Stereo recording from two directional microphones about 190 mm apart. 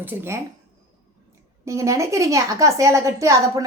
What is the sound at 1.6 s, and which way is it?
A woman's voice, 15° right (ahead or behind).